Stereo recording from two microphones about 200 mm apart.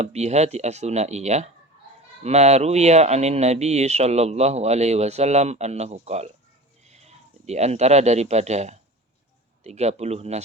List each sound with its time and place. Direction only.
0.0 s speech: 35° right (ahead or behind)